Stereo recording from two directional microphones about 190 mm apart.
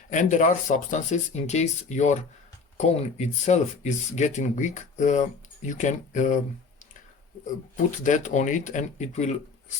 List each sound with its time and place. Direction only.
0.1 s speech: 40° left (ahead or behind)
7.9 s speech: 40° left (ahead or behind)